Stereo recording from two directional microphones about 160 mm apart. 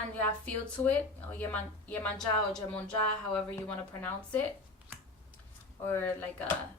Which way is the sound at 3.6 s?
10° left (ahead or behind).